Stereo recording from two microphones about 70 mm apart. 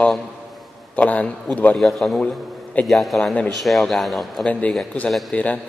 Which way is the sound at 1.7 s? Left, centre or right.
Centre.